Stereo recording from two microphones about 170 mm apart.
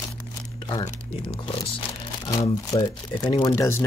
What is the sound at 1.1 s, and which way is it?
Speech, 30° left (ahead or behind).